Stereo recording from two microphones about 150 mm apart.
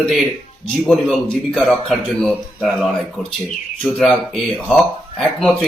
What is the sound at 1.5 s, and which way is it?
Speech, centre (ahead or behind).